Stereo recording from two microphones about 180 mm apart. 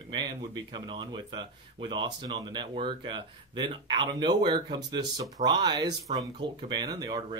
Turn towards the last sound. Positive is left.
turn(degrees=-20)  # may be behind; listen again after turning